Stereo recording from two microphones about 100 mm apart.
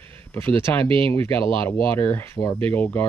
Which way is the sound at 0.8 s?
65° right (ahead or behind).